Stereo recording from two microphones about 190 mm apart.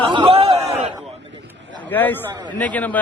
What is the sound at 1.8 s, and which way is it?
A man's voice, 10° left (ahead or behind).